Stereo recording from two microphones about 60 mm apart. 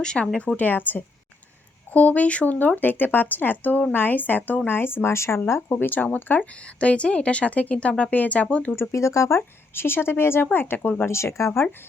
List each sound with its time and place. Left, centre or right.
0.0 s speech: centre; by 6.5 s left
6.7 s speech: centre
8.7 s speech: left
9.7 s speech: left
11.0 s speech: left